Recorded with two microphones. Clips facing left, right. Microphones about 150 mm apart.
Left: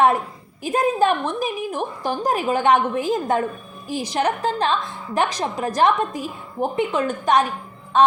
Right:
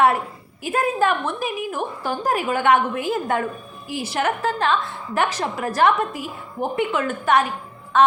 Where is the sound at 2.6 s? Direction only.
40° left (ahead or behind).